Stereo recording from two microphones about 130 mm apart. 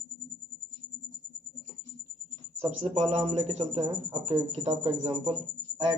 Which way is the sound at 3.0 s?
55° right (ahead or behind).